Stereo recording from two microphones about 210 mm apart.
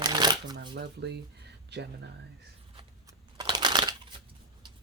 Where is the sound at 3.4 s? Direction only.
20° right (ahead or behind).